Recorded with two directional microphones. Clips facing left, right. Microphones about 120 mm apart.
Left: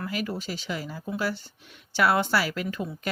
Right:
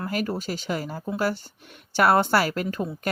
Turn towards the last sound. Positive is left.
turn(degrees=-45)  # may be behind; listen again after turning